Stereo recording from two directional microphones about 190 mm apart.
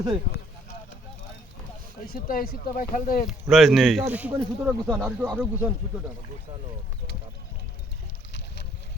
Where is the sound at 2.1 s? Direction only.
50° left (ahead or behind).